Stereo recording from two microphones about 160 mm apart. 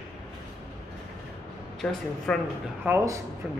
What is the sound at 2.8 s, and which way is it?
Speech, 15° right (ahead or behind).